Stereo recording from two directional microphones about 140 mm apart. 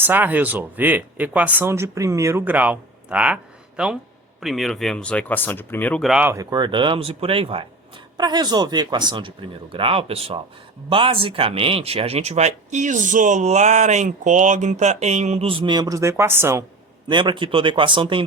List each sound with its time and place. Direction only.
0.0 s speech: 15° right (ahead or behind); by 6.0 s 15° left (ahead or behind)
6.0 s speech: centre (ahead or behind)
6.2 s speech: 25° right (ahead or behind)
17.1 s speech: 35° right (ahead or behind)